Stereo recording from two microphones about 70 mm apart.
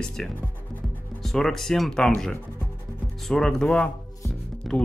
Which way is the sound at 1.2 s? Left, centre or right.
Centre.